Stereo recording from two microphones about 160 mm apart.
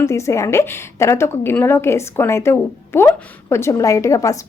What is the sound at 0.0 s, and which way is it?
Speech, 20° left (ahead or behind).